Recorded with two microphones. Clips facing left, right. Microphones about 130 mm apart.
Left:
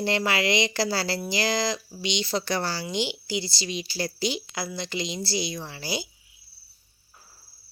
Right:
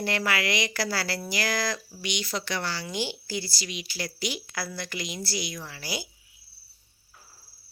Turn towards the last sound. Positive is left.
turn(degrees=25)  # may be behind; listen again after turning